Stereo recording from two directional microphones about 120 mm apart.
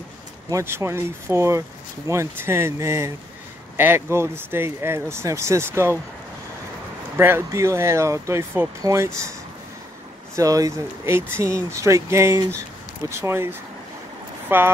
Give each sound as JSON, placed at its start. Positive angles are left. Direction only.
{"t": 0.5, "sound": "speech", "side_deg": -25}
{"t": 7.2, "sound": "speech", "side_deg": -20}
{"t": 10.3, "sound": "speech", "side_deg": -30}